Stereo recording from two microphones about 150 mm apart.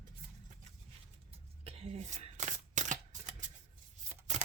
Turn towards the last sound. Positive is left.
turn(degrees=-50)  # may be behind; listen again after turning